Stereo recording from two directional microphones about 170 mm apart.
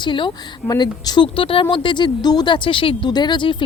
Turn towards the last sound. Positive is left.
turn(degrees=25)  # may be behind; listen again after turning